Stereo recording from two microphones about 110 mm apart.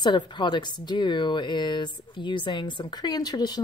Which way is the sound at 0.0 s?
45° left (ahead or behind).